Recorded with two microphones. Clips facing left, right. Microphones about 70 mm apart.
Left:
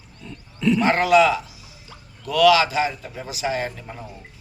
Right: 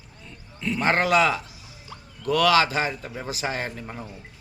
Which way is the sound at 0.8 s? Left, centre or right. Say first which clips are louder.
Left 3 dB; right.